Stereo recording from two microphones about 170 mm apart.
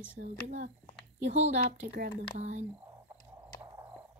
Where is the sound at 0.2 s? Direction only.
60° right (ahead or behind).